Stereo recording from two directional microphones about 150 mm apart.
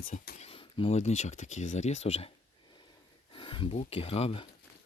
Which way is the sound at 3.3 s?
35° left (ahead or behind).